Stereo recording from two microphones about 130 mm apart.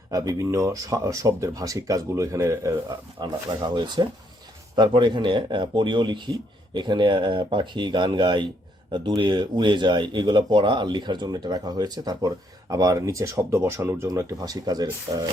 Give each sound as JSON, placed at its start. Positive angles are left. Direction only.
{"t": 0.1, "sound": "speech", "side_deg": -30}
{"t": 3.2, "sound": "speech", "side_deg": -35}